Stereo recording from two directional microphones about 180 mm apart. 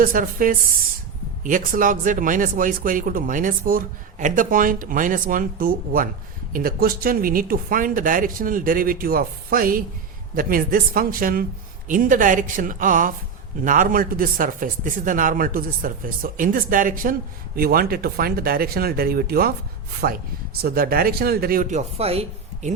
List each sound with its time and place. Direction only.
0.0 s speech: 50° right (ahead or behind); by 22.7 s 35° right (ahead or behind)